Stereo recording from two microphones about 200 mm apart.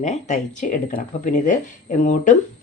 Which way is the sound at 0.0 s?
35° left (ahead or behind).